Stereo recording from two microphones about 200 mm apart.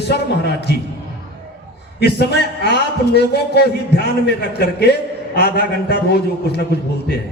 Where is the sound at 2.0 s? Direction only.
55° left (ahead or behind).